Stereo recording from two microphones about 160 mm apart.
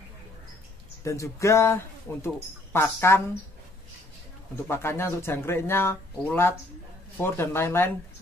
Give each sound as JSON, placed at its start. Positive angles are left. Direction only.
{"t": 1.0, "sound": "speech", "side_deg": 20}
{"t": 4.6, "sound": "speech", "side_deg": 15}